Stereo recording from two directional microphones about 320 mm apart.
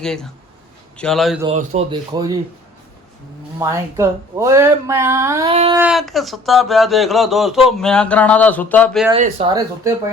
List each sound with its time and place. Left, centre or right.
0.0 s speech: centre
1.5 s speech: centre
3.6 s speech: centre
5.8 s speech: centre
9.0 s speech: centre